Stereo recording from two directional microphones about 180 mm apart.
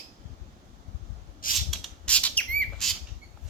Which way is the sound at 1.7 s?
5° left (ahead or behind).